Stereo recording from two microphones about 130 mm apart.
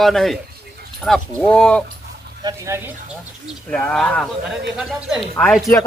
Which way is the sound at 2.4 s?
20° right (ahead or behind).